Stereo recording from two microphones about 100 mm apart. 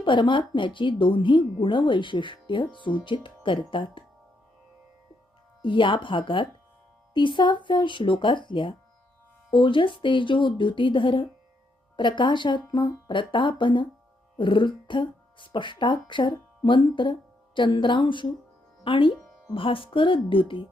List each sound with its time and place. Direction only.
0.0 s a woman's voice: 55° left (ahead or behind)
5.6 s a woman's voice: 55° left (ahead or behind)